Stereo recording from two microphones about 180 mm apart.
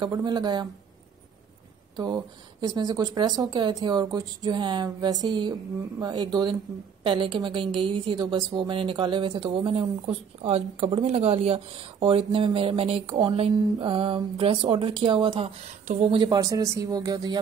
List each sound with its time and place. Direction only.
0.0 s a woman's voice: 25° right (ahead or behind)
2.0 s a woman's voice: 20° right (ahead or behind)
16.3 s a woman's voice: 20° right (ahead or behind)